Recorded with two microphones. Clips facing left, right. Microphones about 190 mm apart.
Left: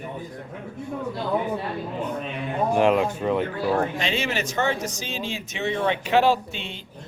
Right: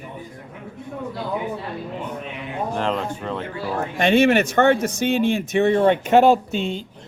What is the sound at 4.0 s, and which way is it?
Speech, 55° right (ahead or behind).